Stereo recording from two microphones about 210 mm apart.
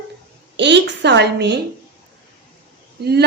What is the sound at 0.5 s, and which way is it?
A woman's voice, 55° right (ahead or behind).